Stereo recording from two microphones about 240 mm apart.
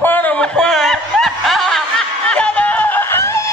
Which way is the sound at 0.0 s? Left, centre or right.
Centre.